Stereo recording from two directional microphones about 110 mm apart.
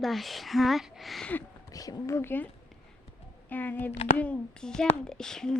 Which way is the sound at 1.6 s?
35° left (ahead or behind).